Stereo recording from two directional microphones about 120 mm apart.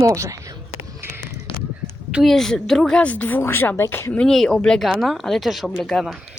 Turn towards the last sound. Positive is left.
turn(degrees=0)  # may be behind; listen again after turning